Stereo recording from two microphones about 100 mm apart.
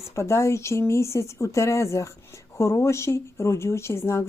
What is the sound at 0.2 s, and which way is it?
Speech, 30° left (ahead or behind).